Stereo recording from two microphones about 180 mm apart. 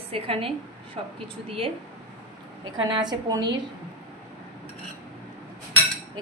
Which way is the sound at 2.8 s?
25° right (ahead or behind).